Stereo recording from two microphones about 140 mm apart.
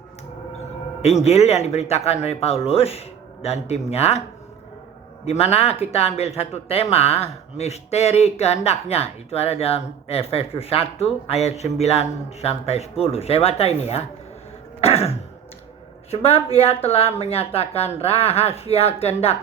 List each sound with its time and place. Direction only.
1.0 s speech: 50° left (ahead or behind)
5.2 s speech: 50° left (ahead or behind)
14.8 s throat clearing: 45° left (ahead or behind)
16.0 s speech: 45° left (ahead or behind)